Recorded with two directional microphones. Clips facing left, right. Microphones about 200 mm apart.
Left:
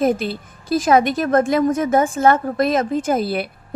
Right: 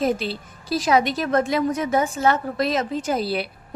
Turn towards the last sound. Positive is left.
turn(degrees=50)  # may be behind; listen again after turning